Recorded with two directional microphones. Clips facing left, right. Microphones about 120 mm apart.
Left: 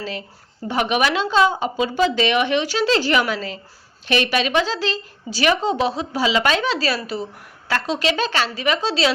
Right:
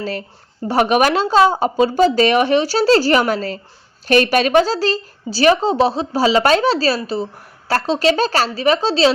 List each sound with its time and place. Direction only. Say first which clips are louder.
0.0 s a woman's voice: right 5 dB; 45° right (ahead or behind)